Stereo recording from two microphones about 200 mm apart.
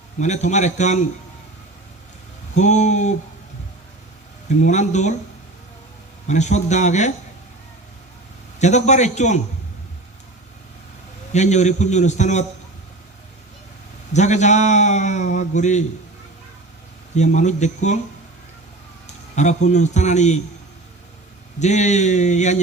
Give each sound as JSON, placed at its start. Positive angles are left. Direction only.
{"t": 0.2, "sound": "a man's voice", "side_deg": 35}
{"t": 2.6, "sound": "a man's voice", "side_deg": 35}
{"t": 4.4, "sound": "a man's voice", "side_deg": 35}
{"t": 6.2, "sound": "a man's voice", "side_deg": 35}
{"t": 8.5, "sound": "a man's voice", "side_deg": 35}
{"t": 11.3, "sound": "a man's voice", "side_deg": 35}
{"t": 14.1, "sound": "a man's voice", "side_deg": 35}
{"t": 17.2, "sound": "a man's voice", "side_deg": 35}
{"t": 19.0, "sound": "a man's voice", "side_deg": 35}
{"t": 21.6, "sound": "a man's voice", "side_deg": 35}